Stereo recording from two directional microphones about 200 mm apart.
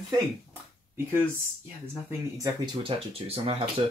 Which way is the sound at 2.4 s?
25° right (ahead or behind).